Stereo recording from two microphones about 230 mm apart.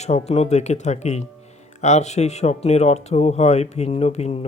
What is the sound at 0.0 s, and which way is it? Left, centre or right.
Speech, left.